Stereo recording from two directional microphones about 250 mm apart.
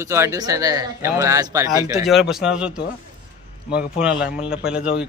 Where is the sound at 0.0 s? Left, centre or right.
Centre.